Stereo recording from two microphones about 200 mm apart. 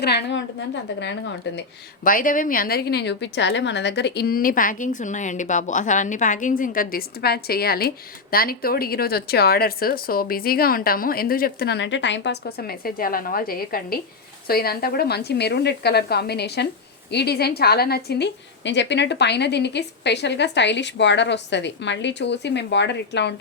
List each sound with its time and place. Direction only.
0.0 s a woman's voice: 55° left (ahead or behind)
1.5 s a woman's voice: 60° left (ahead or behind)
2.0 s a woman's voice: 45° left (ahead or behind); by 23.3 s 60° left (ahead or behind)